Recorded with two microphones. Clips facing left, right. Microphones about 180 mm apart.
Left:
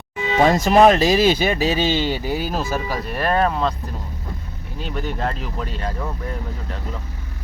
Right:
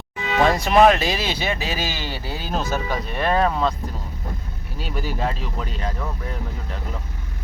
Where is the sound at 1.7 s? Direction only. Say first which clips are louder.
Left 8 dB; 25° left (ahead or behind); by 3.8 s centre (ahead or behind).